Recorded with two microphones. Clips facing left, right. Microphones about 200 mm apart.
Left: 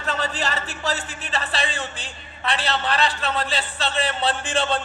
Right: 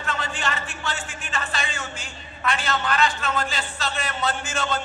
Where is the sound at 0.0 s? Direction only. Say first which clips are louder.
Left 3 dB; 35° left (ahead or behind).